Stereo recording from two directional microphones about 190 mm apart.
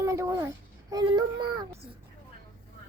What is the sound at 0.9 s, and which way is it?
Child singing, 20° right (ahead or behind).